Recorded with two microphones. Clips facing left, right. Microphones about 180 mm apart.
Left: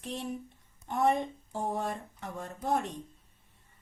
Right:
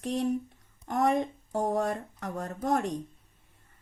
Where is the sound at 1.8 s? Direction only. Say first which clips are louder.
Right 5 dB; 60° right (ahead or behind).